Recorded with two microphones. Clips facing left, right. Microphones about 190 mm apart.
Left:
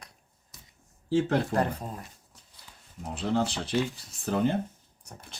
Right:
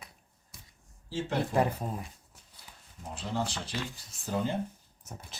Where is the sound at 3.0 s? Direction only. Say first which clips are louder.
Left 6 dB; 65° left (ahead or behind).